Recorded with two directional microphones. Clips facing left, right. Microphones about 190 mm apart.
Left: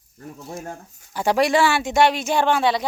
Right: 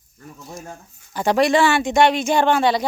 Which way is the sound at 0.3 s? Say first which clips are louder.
Left 2 dB; 30° left (ahead or behind).